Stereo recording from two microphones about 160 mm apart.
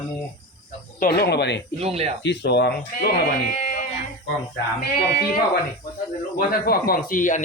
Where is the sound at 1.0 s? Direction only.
75° left (ahead or behind); by 1.6 s 90° left.